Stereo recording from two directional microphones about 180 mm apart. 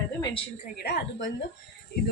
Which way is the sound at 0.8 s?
70° left (ahead or behind).